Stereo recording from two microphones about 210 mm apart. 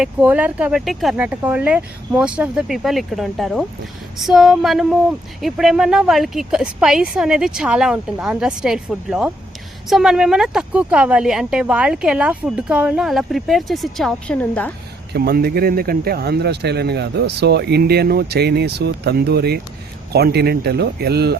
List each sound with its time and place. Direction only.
0.0 s speech: 5° right (ahead or behind)
15.1 s speech: 45° right (ahead or behind)